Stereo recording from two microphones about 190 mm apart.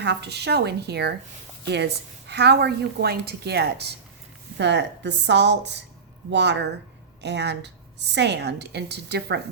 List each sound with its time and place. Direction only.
0.0 s a woman's voice: 65° right (ahead or behind)